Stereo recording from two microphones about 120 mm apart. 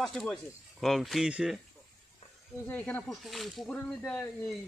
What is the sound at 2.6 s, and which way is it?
Speech, 15° left (ahead or behind).